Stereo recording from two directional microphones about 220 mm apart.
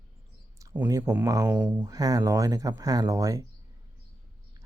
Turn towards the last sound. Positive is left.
turn(degrees=-15)  # may be behind; listen again after turning